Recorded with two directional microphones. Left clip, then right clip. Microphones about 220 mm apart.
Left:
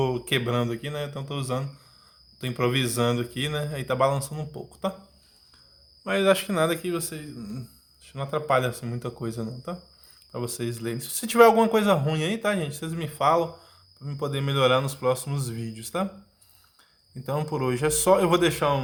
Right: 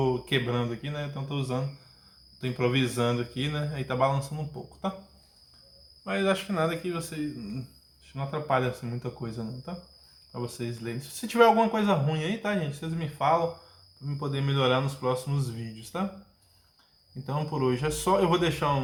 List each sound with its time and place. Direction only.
0.0 s speech: 50° left (ahead or behind)
6.1 s speech: 40° left (ahead or behind)
17.2 s speech: 50° left (ahead or behind)